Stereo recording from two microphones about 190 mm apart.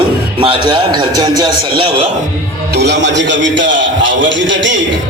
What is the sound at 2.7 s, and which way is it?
A man's voice, 60° right (ahead or behind).